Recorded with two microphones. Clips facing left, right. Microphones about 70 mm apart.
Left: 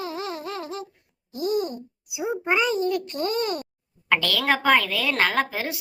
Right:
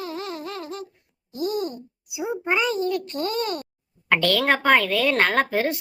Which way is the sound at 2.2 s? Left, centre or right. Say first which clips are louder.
Even; centre.